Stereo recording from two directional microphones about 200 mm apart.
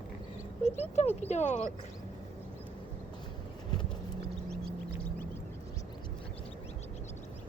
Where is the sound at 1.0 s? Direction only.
35° left (ahead or behind).